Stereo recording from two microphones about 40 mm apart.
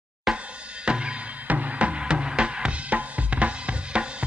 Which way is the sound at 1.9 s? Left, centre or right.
Right.